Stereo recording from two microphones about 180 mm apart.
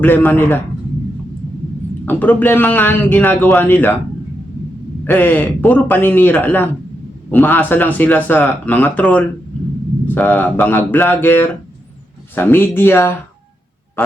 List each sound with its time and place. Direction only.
0.0 s speech: 10° left (ahead or behind)
2.0 s speech: 10° left (ahead or behind)
5.0 s speech: 10° left (ahead or behind)